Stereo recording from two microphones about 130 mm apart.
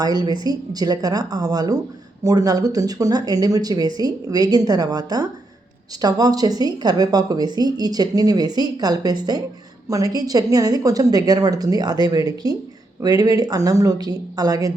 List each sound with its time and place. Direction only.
0.0 s a woman's voice: 30° right (ahead or behind)